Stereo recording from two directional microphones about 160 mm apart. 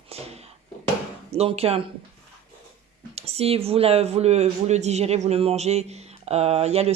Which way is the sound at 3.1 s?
40° right (ahead or behind).